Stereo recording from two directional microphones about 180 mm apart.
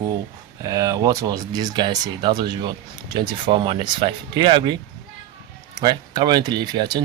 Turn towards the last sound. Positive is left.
turn(degrees=-25)  # may be behind; listen again after turning